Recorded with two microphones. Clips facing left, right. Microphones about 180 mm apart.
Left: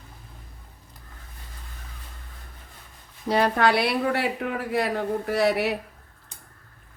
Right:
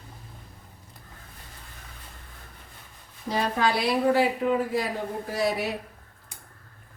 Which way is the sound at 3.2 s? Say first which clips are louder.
Left 4 dB; 65° left (ahead or behind).